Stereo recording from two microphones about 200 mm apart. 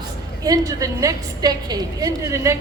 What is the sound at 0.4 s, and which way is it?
A woman's voice, 15° right (ahead or behind).